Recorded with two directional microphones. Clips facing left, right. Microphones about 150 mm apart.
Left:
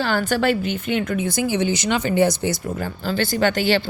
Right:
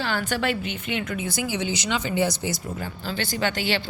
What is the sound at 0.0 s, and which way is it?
A woman's voice, 40° left (ahead or behind).